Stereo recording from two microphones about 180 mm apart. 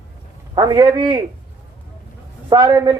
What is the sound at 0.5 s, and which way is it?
Speech, 20° right (ahead or behind).